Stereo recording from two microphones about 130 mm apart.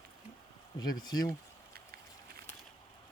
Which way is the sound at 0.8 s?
30° left (ahead or behind).